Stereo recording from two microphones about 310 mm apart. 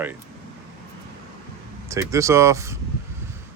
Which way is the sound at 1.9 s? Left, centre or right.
Centre.